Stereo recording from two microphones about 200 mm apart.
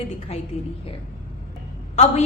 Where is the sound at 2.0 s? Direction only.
35° left (ahead or behind).